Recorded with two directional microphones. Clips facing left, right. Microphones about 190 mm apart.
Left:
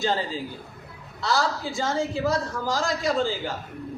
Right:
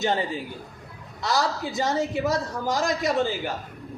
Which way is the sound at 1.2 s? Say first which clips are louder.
Even; 20° right (ahead or behind).